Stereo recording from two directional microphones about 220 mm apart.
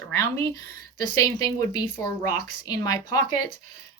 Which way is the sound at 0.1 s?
10° left (ahead or behind).